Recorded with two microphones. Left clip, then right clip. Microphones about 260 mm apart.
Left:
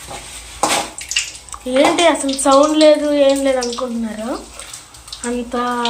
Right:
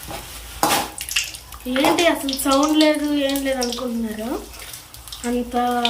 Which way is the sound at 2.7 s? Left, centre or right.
Centre.